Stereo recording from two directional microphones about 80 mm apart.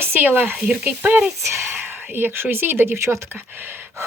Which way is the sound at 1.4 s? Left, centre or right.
Right.